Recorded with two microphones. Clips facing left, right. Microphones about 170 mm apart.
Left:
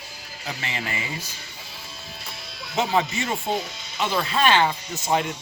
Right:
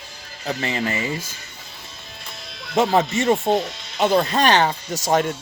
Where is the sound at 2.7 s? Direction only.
50° right (ahead or behind).